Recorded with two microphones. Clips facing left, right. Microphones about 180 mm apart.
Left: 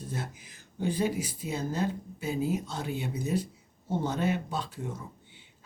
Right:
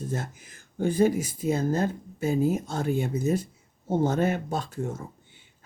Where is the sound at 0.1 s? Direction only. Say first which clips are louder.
Right 4 dB; 45° right (ahead or behind).